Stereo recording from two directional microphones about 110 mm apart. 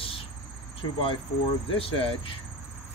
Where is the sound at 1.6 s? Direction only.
60° left (ahead or behind).